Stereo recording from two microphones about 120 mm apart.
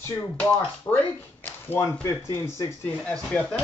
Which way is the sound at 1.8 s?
25° left (ahead or behind).